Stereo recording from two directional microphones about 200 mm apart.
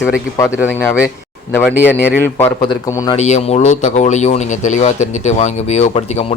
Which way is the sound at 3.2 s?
35° left (ahead or behind).